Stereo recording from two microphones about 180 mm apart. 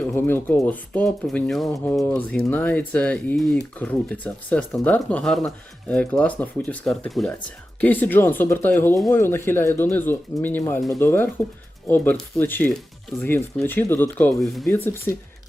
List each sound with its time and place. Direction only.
0.1 s speech: 10° left (ahead or behind)